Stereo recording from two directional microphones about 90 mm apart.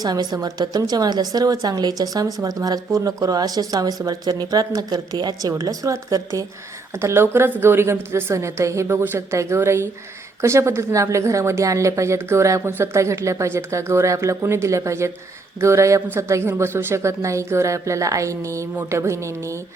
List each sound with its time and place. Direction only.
0.0 s speech: 45° right (ahead or behind)
7.0 s a woman's voice: 30° right (ahead or behind)